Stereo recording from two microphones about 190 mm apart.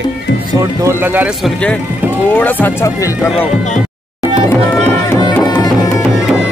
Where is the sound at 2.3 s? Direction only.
10° left (ahead or behind).